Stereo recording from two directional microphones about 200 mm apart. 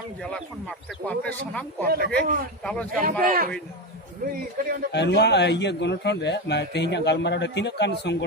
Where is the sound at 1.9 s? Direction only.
50° right (ahead or behind).